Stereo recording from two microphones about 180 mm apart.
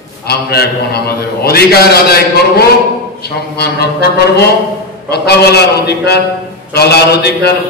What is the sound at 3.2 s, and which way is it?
A man's voice, 65° left (ahead or behind).